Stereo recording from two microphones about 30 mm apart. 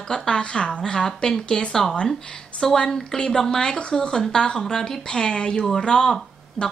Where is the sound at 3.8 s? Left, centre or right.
Left.